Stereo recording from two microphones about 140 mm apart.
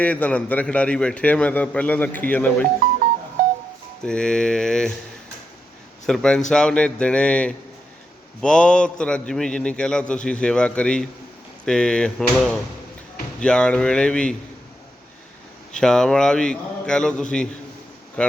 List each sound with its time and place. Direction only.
0.0 s a man's voice: 10° left (ahead or behind)
4.0 s a man's voice: 5° left (ahead or behind)
6.1 s a man's voice: 5° left (ahead or behind)
15.8 s a man's voice: 5° left (ahead or behind)